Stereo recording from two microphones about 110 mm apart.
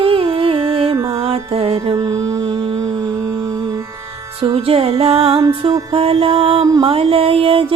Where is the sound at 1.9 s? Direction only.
35° right (ahead or behind).